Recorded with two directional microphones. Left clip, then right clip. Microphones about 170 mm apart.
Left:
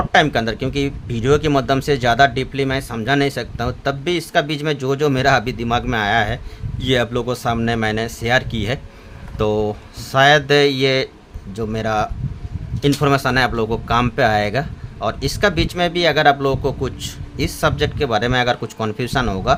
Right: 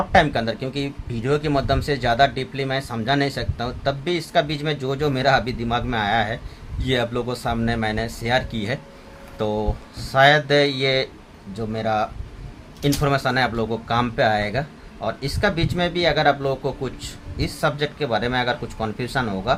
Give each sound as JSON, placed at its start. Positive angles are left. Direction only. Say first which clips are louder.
{"t": 0.1, "sound": "speech", "louder": "left 3 dB", "side_deg": 55}